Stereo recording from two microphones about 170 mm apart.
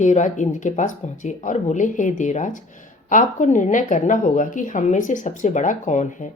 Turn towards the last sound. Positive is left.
turn(degrees=45)  # may be behind; listen again after turning